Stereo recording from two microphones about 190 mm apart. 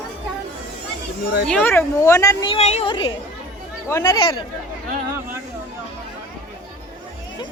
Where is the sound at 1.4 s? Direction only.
5° left (ahead or behind); by 3.1 s 25° left (ahead or behind).